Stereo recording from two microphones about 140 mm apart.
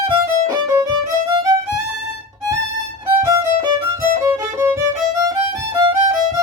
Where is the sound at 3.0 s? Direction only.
20° right (ahead or behind).